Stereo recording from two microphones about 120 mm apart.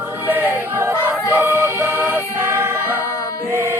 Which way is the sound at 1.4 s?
20° right (ahead or behind).